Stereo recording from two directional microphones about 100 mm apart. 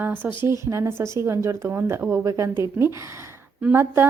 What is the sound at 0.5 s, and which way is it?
A woman's voice, 30° right (ahead or behind).